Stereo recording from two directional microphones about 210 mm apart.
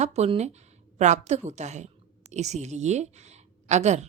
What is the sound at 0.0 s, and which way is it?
A woman's voice, 30° right (ahead or behind).